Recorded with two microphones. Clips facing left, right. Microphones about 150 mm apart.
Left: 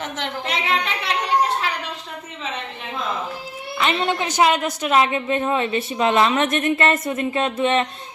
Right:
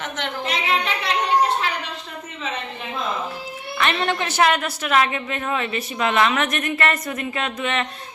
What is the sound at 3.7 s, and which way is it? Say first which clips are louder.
A woman's voice: left 1 dB; 15° left (ahead or behind).